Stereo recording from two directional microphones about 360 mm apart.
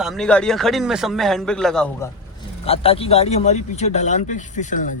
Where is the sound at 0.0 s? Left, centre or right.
Centre.